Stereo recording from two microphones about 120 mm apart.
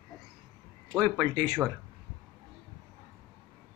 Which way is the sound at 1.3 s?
40° right (ahead or behind).